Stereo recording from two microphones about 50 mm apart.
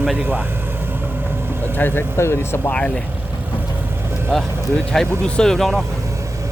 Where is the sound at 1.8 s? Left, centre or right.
Left.